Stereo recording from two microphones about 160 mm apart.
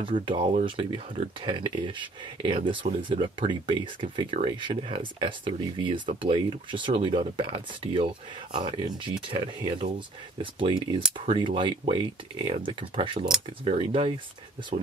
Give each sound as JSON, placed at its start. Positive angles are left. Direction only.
{"t": 0.0, "sound": "speech", "side_deg": -30}
{"t": 0.4, "sound": "speech", "side_deg": -50}
{"t": 0.7, "sound": "speech", "side_deg": -35}